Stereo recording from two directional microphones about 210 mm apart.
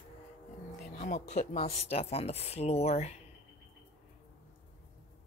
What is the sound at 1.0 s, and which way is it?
Speech, 35° left (ahead or behind).